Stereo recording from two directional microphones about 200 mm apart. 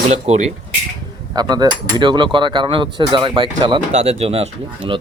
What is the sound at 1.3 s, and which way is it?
Speech, 20° right (ahead or behind).